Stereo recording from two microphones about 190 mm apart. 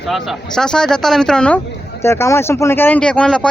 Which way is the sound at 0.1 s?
Centre (ahead or behind).